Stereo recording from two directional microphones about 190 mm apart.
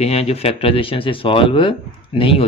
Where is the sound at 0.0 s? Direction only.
30° left (ahead or behind).